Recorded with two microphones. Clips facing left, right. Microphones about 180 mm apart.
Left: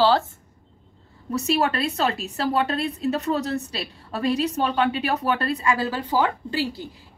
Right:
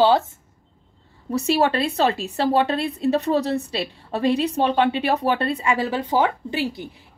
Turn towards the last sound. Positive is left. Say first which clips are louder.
# right 1 dB
turn(degrees=-20)  # may be behind; listen again after turning